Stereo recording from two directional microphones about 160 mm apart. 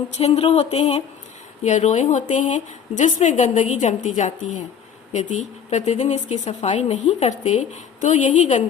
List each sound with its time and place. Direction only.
0.2 s speech: 40° left (ahead or behind)